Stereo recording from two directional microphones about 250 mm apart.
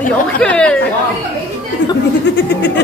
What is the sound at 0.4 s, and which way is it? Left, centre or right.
Speech, centre.